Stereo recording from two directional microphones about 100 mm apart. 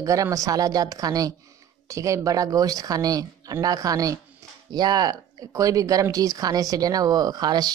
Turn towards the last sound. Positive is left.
turn(degrees=-45)  # may be behind; listen again after turning